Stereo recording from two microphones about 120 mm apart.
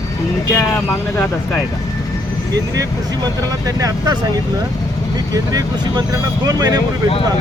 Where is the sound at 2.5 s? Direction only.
30° right (ahead or behind).